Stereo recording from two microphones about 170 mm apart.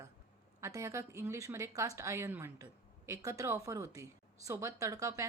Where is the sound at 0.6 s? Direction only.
15° right (ahead or behind).